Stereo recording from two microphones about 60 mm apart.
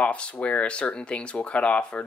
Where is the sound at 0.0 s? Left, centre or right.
Left.